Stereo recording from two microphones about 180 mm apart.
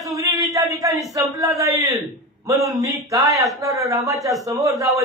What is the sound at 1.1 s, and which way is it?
A man's voice, 20° right (ahead or behind).